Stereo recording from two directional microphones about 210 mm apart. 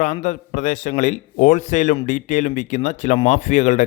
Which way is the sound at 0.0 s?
35° left (ahead or behind).